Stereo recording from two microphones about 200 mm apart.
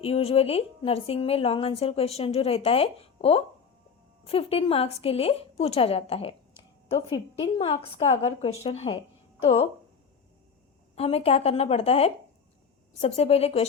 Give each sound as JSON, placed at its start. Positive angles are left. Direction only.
{"t": 0.0, "sound": "a woman's voice", "side_deg": 30}
{"t": 10.9, "sound": "a woman's voice", "side_deg": 30}